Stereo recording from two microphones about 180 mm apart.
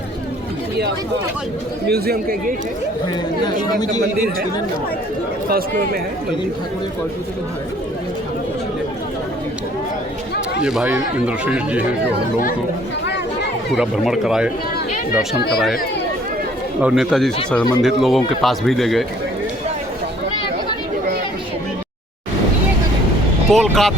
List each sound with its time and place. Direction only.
1.9 s speech: 55° right (ahead or behind)
3.4 s speech: 20° left (ahead or behind)
10.6 s speech: 5° right (ahead or behind)
13.7 s speech: centre (ahead or behind)
16.8 s speech: centre (ahead or behind)
23.5 s speech: centre (ahead or behind)